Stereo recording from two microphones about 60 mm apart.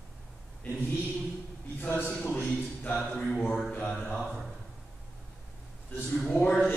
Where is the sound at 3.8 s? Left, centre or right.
Centre.